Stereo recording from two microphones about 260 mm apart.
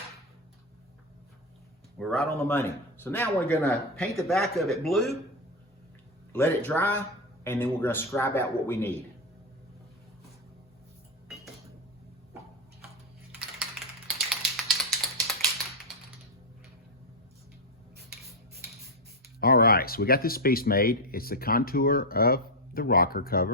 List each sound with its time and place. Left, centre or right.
2.0 s speech: centre
6.3 s a man's voice: centre
14.5 s a sound: centre
19.4 s speech: left